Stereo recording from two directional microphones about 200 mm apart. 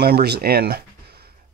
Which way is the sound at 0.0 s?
55° right (ahead or behind).